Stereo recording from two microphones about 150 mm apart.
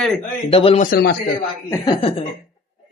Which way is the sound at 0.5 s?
40° left (ahead or behind).